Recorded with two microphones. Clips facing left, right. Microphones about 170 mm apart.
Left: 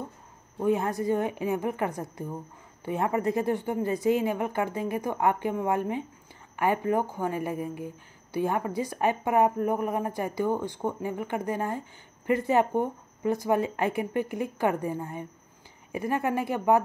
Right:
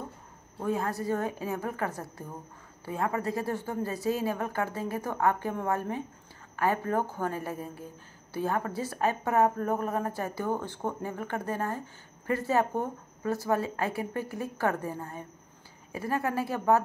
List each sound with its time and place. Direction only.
0.6 s a woman's voice: 20° left (ahead or behind)